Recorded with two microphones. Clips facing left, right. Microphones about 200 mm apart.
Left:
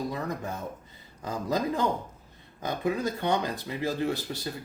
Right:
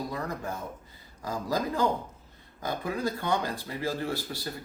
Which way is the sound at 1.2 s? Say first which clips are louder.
Left 1 dB; 20° left (ahead or behind).